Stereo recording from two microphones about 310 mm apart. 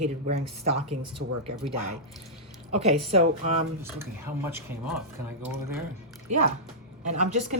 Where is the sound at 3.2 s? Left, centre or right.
Centre.